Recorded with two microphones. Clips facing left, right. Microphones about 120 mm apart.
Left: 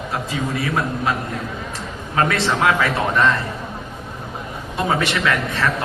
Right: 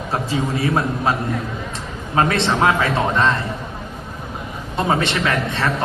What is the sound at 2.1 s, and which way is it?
A man's voice, 25° right (ahead or behind).